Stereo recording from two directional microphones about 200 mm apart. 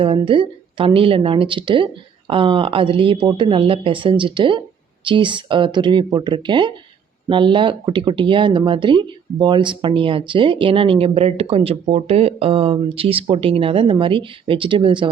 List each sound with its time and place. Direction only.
0.0 s speech: 25° right (ahead or behind)